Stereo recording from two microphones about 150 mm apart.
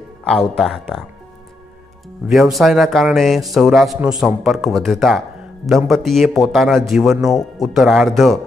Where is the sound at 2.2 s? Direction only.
Centre (ahead or behind).